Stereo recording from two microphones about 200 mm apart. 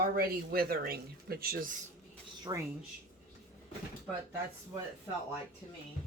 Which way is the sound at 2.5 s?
20° right (ahead or behind).